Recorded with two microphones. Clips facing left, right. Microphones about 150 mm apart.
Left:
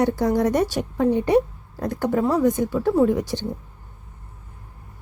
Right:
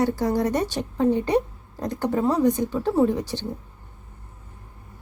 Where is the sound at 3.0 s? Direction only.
15° left (ahead or behind).